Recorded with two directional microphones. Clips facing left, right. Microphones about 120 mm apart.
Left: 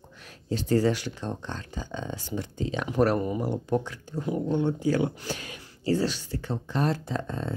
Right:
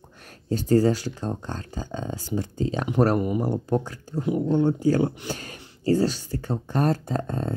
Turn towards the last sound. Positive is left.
turn(degrees=-45)  # may be behind; listen again after turning